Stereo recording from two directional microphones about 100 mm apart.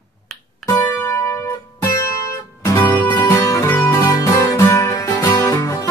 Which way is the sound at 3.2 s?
35° left (ahead or behind).